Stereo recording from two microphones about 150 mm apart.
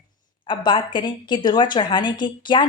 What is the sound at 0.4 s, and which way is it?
A woman's voice, 30° left (ahead or behind).